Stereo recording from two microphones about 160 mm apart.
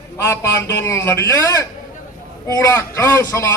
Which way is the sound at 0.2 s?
20° left (ahead or behind).